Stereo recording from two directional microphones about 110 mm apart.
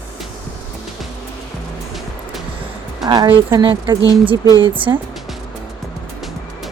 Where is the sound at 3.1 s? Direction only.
50° right (ahead or behind).